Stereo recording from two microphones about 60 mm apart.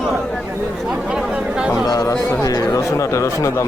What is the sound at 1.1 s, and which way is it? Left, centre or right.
Chatter, centre.